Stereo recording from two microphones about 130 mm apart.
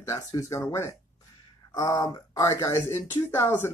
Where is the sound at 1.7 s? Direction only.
30° left (ahead or behind).